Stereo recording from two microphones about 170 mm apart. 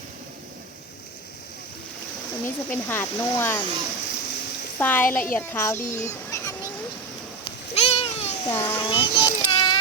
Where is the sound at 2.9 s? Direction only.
10° left (ahead or behind).